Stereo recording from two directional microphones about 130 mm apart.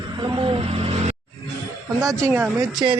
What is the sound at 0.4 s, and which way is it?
Vehicle, 45° right (ahead or behind).